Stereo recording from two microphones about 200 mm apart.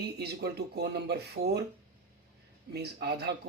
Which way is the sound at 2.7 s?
55° right (ahead or behind).